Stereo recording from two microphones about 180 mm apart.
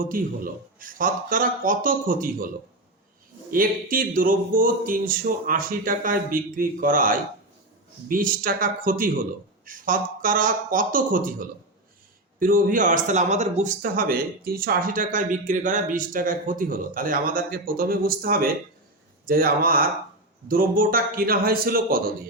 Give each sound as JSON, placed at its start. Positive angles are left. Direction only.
{"t": 0.0, "sound": "speech", "side_deg": -50}
{"t": 3.5, "sound": "speech", "side_deg": -50}